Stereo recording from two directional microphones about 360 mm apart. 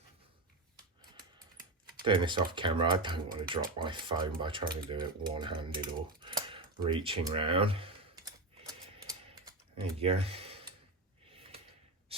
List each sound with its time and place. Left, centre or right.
2.0 s speech: centre
10.0 s speech: centre